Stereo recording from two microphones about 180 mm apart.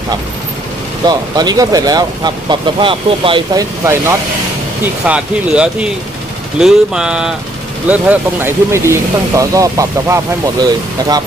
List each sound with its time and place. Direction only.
1.0 s speech: 20° right (ahead or behind)